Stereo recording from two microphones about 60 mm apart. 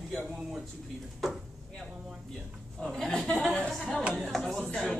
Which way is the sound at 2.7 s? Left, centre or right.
Centre.